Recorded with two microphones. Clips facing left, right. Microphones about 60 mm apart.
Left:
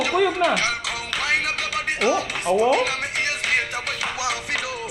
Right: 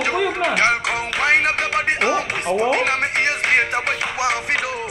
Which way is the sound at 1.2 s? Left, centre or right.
Right.